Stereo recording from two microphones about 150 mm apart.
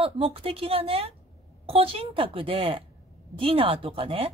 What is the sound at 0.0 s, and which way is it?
A woman's voice, 40° right (ahead or behind).